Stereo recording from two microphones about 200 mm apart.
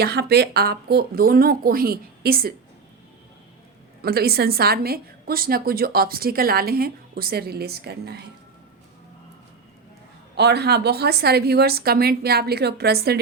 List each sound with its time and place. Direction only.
0.0 s a woman's voice: 55° right (ahead or behind)
4.0 s a woman's voice: 50° right (ahead or behind)
10.3 s a woman's voice: 55° right (ahead or behind)